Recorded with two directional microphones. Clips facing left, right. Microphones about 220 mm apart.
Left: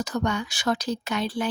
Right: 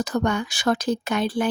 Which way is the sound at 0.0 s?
50° right (ahead or behind).